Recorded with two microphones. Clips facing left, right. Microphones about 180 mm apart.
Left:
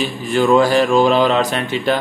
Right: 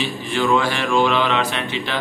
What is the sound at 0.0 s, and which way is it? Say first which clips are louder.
Mantra: left 5 dB; 40° left (ahead or behind).